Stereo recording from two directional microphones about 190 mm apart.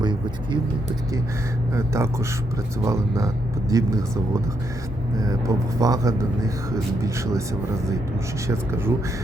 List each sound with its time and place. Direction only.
0.0 s vehicle: 25° right (ahead or behind)
1.7 s speech: 15° right (ahead or behind)
5.2 s speech: 20° right (ahead or behind)
8.4 s speech: 15° right (ahead or behind)